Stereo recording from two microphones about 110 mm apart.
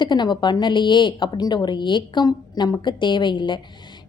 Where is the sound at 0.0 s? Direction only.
45° left (ahead or behind).